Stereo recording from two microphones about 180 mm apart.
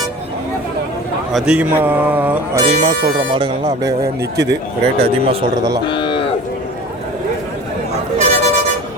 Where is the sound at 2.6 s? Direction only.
40° right (ahead or behind).